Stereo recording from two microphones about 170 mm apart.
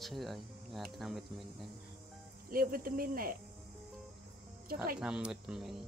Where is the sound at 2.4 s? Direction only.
55° right (ahead or behind).